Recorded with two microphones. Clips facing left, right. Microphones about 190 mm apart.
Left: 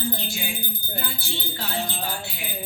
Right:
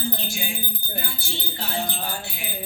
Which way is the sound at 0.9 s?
60° left (ahead or behind).